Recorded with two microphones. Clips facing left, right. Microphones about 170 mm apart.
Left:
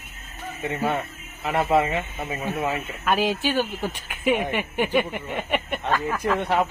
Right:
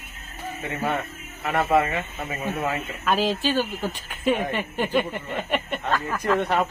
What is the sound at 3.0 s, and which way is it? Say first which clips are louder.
Speech: even; 5° left (ahead or behind).